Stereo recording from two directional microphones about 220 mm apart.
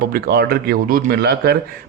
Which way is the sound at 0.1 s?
45° right (ahead or behind).